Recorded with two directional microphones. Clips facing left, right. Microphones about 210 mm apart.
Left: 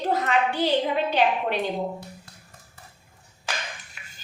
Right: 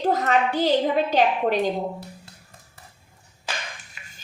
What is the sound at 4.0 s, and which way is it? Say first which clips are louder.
Music: right 1 dB; centre (ahead or behind).